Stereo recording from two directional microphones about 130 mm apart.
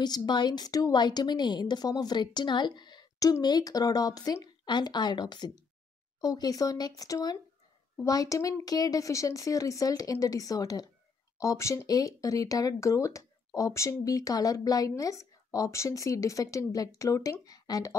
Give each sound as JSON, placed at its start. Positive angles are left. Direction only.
{"t": 0.0, "sound": "a woman's voice", "side_deg": 35}